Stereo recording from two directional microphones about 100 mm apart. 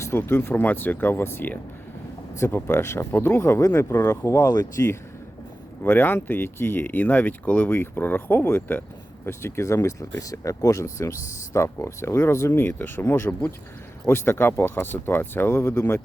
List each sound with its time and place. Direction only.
0.0 s speech: 25° left (ahead or behind)
2.6 s speech: 25° left (ahead or behind); by 4.6 s 40° left (ahead or behind)
5.8 s speech: 20° left (ahead or behind)